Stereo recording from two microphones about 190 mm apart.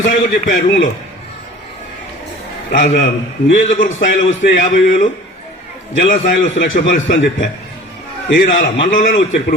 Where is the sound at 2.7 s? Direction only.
45° left (ahead or behind).